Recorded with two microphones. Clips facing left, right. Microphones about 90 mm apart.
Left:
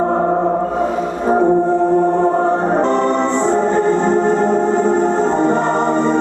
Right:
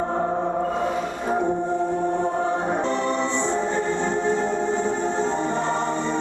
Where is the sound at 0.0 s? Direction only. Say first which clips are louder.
Left 8 dB; 60° left (ahead or behind).